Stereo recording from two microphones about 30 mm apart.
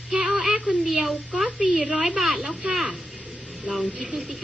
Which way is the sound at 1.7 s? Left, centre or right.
Centre.